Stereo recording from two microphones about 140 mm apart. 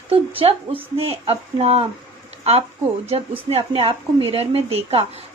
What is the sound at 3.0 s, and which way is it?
Speech, 45° right (ahead or behind).